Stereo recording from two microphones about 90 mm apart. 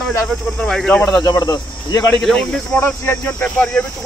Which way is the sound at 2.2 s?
10° left (ahead or behind).